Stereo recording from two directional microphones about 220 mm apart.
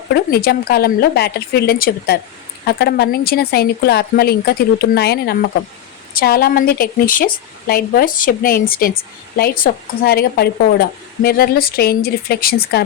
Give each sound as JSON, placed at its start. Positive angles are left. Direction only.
{"t": 0.1, "sound": "a woman's voice", "side_deg": 45}